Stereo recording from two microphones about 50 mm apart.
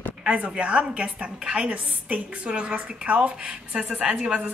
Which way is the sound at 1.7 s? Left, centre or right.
Right.